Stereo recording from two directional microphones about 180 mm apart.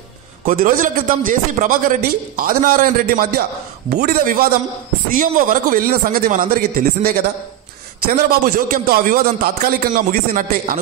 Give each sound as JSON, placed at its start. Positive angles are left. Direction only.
{"t": 0.5, "sound": "a man's voice", "side_deg": -50}